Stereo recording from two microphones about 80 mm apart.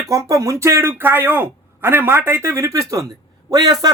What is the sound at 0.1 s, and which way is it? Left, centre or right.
Speech, right.